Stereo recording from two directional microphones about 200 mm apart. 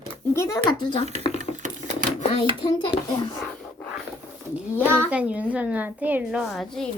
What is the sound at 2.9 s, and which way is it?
Speech, 5° right (ahead or behind).